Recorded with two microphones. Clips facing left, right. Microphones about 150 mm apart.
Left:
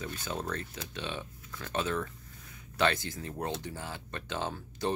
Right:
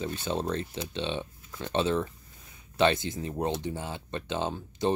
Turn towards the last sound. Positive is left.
turn(degrees=-20)  # may be behind; listen again after turning